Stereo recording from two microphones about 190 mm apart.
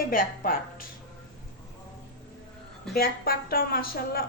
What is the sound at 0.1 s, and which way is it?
Speech, 45° left (ahead or behind).